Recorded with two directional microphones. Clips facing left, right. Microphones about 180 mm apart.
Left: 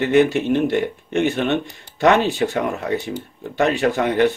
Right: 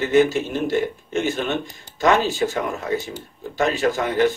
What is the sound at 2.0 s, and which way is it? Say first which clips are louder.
Speech: left 2 dB; 65° left (ahead or behind).